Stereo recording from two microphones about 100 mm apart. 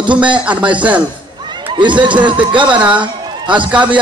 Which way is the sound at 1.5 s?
50° right (ahead or behind).